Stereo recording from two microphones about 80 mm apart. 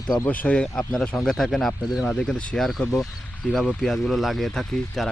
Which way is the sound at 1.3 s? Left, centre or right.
Centre.